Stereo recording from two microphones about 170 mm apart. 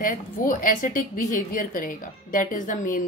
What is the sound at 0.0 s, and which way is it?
A woman's voice, 55° left (ahead or behind).